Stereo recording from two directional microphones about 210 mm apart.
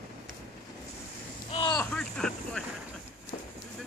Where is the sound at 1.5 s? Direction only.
20° left (ahead or behind).